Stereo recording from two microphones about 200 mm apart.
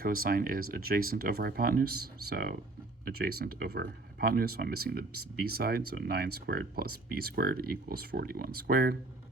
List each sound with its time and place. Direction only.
0.0 s speech: 45° right (ahead or behind)